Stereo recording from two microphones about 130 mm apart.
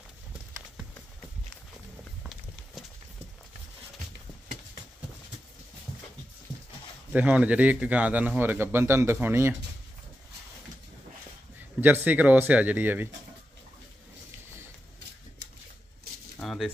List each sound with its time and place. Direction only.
7.1 s speech: 10° right (ahead or behind)
11.8 s speech: 15° right (ahead or behind)
16.3 s a sound: centre (ahead or behind)